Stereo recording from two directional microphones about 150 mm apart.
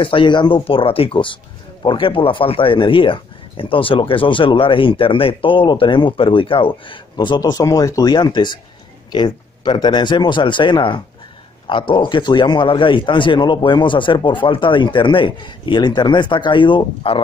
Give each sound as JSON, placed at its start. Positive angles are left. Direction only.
{"t": 0.0, "sound": "speech", "side_deg": 35}